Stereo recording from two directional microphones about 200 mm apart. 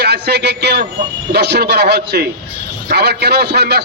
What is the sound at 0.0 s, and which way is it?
A man's voice, 55° right (ahead or behind).